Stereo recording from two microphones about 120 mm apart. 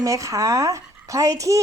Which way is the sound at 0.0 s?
25° right (ahead or behind).